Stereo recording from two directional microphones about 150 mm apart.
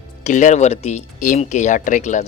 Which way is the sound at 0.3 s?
55° left (ahead or behind).